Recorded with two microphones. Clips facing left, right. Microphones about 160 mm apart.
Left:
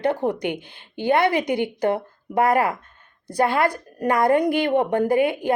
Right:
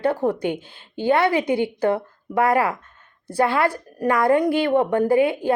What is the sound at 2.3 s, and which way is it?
Speech, 40° left (ahead or behind).